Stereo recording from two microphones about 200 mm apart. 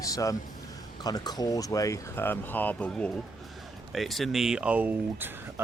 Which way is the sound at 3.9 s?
Centre (ahead or behind).